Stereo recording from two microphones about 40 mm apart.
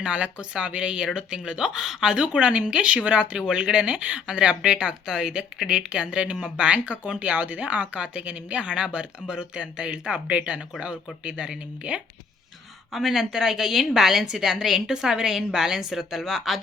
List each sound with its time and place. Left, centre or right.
0.0 s speech: right; by 2.1 s centre
2.1 s speech: right
12.9 s a woman's voice: centre